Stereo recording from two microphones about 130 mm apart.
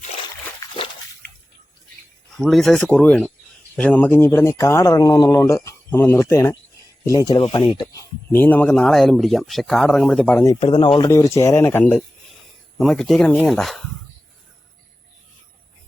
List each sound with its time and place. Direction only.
2.4 s speech: centre (ahead or behind); by 6.5 s 20° left (ahead or behind)
7.3 s speech: 35° left (ahead or behind)
8.3 s speech: 15° left (ahead or behind)
10.3 s speech: 25° left (ahead or behind)
10.6 s speech: 40° left (ahead or behind)
11.1 s speech: 20° left (ahead or behind)
12.8 s speech: centre (ahead or behind)